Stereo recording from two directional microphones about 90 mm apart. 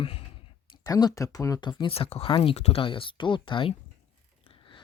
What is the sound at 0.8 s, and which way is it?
Speech, 45° left (ahead or behind).